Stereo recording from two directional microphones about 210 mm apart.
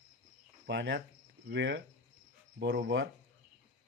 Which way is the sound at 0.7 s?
55° right (ahead or behind).